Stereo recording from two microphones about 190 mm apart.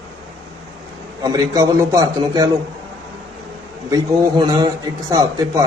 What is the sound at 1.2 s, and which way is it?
Speech, 20° right (ahead or behind).